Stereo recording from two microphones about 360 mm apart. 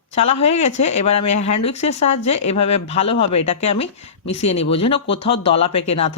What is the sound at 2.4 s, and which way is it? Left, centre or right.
Speech, centre.